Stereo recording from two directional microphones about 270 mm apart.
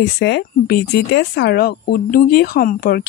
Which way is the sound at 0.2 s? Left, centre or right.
Left.